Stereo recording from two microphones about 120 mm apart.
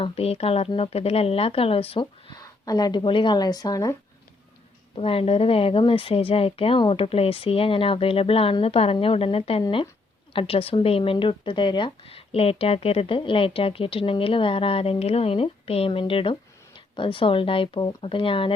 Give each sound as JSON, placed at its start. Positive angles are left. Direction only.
{"t": 0.0, "sound": "speech", "side_deg": 55}
{"t": 2.3, "sound": "speech", "side_deg": 30}
{"t": 4.9, "sound": "speech", "side_deg": 50}